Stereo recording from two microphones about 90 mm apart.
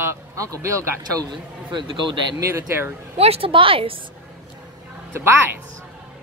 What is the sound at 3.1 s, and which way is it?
Speech, 85° right.